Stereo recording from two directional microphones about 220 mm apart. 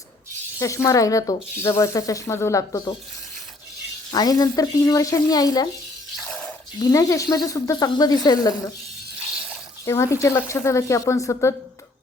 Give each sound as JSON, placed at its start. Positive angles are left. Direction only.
{"t": 0.6, "sound": "speech", "side_deg": 15}
{"t": 4.1, "sound": "speech", "side_deg": 15}
{"t": 6.2, "sound": "a sound", "side_deg": 5}
{"t": 6.7, "sound": "speech", "side_deg": 15}
{"t": 9.8, "sound": "speech", "side_deg": 15}